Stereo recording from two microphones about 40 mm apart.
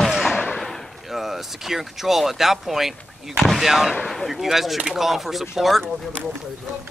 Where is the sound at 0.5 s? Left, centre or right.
Centre.